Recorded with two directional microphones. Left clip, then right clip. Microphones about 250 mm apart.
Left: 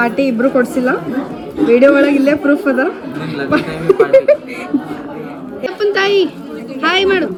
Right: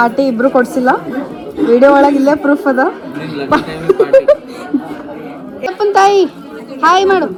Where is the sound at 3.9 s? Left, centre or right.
Right.